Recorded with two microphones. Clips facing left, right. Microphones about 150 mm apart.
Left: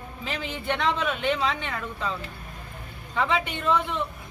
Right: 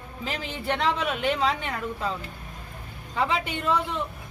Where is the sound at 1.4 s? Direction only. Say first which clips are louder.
Right 2 dB; 40° right (ahead or behind).